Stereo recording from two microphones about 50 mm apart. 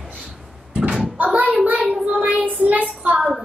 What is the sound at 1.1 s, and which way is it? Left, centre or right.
Cupboard open or close, right.